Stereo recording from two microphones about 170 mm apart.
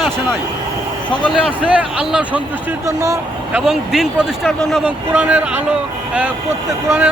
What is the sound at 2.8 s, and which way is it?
Speech, 20° right (ahead or behind).